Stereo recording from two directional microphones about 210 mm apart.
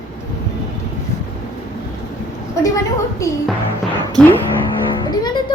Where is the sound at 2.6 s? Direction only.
15° left (ahead or behind).